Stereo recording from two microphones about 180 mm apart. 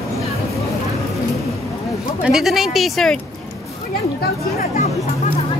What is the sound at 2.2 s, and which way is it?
Speech, centre (ahead or behind).